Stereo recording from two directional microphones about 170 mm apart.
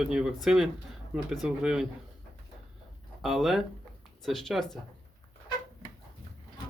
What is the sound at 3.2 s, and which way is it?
Speech, centre (ahead or behind).